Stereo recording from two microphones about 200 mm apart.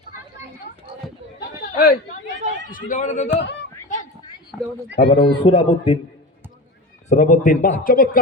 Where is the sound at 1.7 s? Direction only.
50° left (ahead or behind).